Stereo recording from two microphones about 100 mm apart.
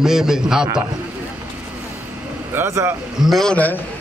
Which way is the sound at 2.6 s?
25° right (ahead or behind).